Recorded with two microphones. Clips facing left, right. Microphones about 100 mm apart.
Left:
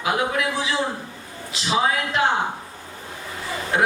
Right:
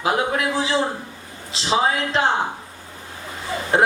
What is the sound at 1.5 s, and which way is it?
Speech, 30° right (ahead or behind).